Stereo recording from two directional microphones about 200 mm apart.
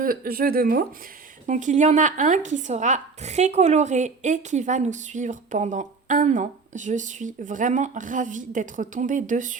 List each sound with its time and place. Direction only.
0.0 s speech: 45° right (ahead or behind)
1.5 s speech: 35° right (ahead or behind)